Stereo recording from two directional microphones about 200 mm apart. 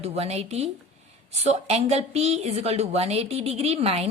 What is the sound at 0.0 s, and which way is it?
A woman's voice, 30° right (ahead or behind).